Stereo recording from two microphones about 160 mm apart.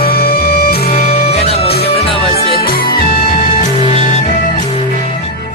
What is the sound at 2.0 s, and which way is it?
Music, 35° left (ahead or behind).